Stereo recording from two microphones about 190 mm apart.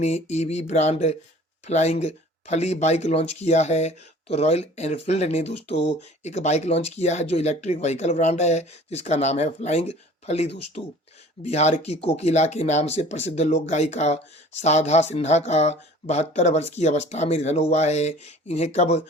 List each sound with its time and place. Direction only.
0.0 s speech: 35° left (ahead or behind)